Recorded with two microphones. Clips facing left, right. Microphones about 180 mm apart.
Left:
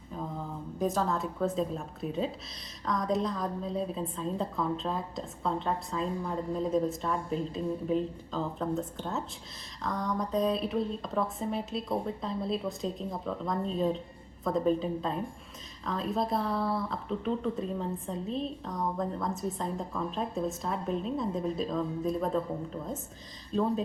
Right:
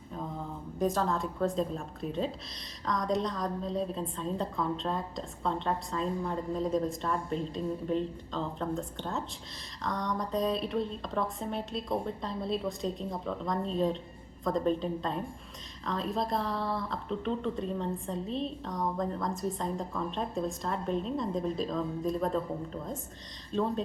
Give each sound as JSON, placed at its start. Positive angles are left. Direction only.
{"t": 0.1, "sound": "a woman's voice", "side_deg": 0}